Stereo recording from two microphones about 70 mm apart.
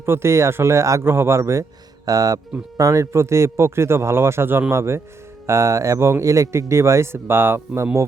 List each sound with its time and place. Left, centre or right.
0.0 s speech: right
2.0 s a man's voice: right